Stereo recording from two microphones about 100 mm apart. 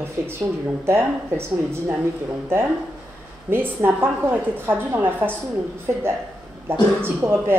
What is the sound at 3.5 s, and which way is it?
Speech, 20° right (ahead or behind).